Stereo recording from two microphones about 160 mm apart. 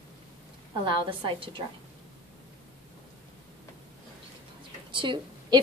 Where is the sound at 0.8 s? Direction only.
30° right (ahead or behind).